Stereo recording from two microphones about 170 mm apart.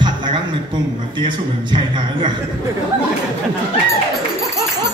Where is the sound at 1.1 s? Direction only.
25° right (ahead or behind).